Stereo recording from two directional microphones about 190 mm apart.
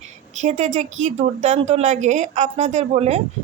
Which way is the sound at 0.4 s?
40° right (ahead or behind).